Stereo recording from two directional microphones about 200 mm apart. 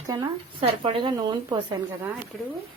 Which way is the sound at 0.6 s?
25° right (ahead or behind).